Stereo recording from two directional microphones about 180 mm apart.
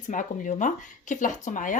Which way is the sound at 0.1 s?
45° left (ahead or behind).